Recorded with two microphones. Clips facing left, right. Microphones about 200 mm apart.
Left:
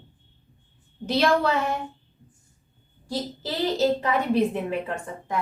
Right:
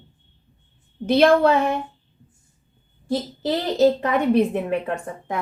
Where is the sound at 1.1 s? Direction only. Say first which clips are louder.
Right 6 dB; 60° right (ahead or behind).